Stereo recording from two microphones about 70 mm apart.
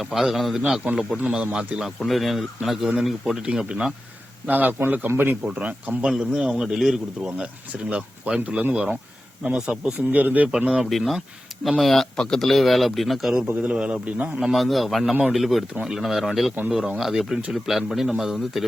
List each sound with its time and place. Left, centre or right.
0.0 s speech: centre
2.0 s speech: centre
3.4 s speech: centre
4.4 s speech: right
5.5 s speech: centre
6.1 s speech: centre
10.1 s speech: right
10.7 s speech: centre
13.6 s speech: centre
14.5 s speech: centre